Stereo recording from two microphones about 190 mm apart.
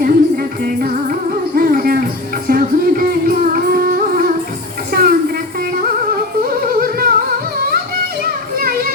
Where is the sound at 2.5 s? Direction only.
50° right (ahead or behind).